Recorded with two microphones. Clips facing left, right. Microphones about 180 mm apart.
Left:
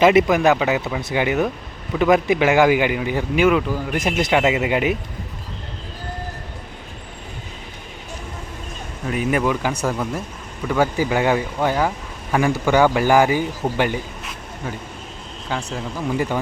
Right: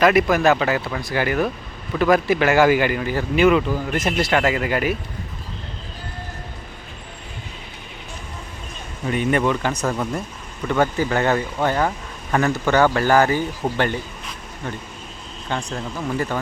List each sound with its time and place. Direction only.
0.0 s speech: 25° left (ahead or behind); by 4.0 s 5° left (ahead or behind)
4.0 s speech: 15° left (ahead or behind)
9.0 s speech: 5° left (ahead or behind)